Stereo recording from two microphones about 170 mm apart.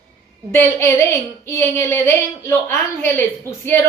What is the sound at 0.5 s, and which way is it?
Speech, 15° left (ahead or behind).